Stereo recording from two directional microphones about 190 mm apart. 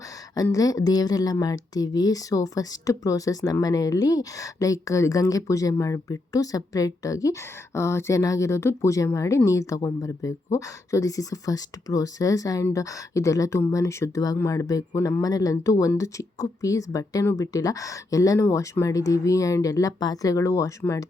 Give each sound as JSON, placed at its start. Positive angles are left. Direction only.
{"t": 0.4, "sound": "a woman's voice", "side_deg": 20}